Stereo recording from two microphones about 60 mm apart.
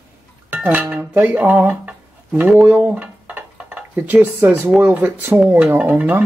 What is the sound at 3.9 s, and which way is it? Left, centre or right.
Speech, right.